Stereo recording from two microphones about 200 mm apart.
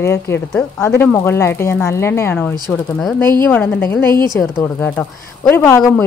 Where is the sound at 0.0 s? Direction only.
15° left (ahead or behind).